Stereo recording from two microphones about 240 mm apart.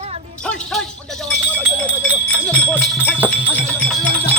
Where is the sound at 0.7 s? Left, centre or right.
Centre.